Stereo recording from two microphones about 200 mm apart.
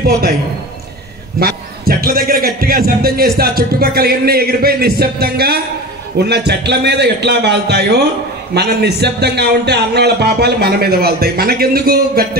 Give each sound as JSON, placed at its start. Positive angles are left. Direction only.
{"t": 1.4, "sound": "a man's voice", "side_deg": -50}